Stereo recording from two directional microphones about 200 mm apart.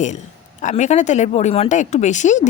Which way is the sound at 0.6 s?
35° left (ahead or behind).